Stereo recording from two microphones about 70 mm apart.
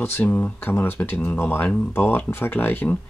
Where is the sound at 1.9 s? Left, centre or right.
Left.